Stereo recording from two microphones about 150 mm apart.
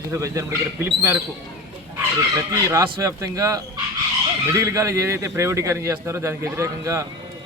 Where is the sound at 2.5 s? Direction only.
20° right (ahead or behind).